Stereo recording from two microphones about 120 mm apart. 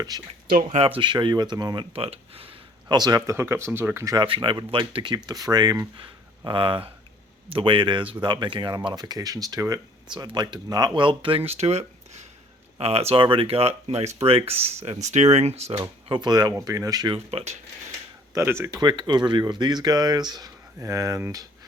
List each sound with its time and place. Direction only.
0.1 s speech: 30° right (ahead or behind)
0.7 s speech: 50° right (ahead or behind)
2.9 s speech: 35° right (ahead or behind); by 14.5 s 55° right (ahead or behind)
15.0 s speech: 70° right (ahead or behind)
15.8 s speech: 40° right (ahead or behind)
17.1 s speech: 55° right (ahead or behind)
18.3 s speech: 20° right (ahead or behind)
18.8 s speech: 40° right (ahead or behind)